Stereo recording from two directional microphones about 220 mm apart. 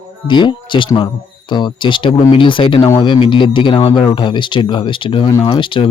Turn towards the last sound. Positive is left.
turn(degrees=20)  # may be behind; listen again after turning